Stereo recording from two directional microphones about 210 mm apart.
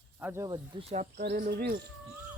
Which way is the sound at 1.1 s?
55° right (ahead or behind).